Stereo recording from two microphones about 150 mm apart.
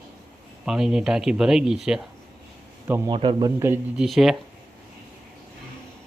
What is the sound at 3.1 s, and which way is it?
Speech, 30° right (ahead or behind).